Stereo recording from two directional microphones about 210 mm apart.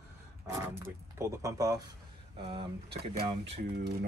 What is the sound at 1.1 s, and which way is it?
Speech, 15° right (ahead or behind).